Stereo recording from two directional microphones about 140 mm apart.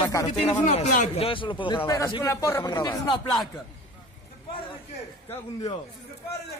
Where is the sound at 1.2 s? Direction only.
40° left (ahead or behind).